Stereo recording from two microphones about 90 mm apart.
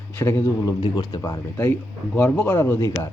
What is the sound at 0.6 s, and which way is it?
Speech, 50° left (ahead or behind).